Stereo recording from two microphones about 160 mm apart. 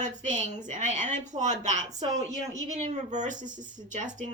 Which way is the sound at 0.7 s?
45° right (ahead or behind).